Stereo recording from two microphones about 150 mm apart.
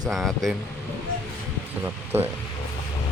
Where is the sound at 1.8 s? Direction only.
10° right (ahead or behind).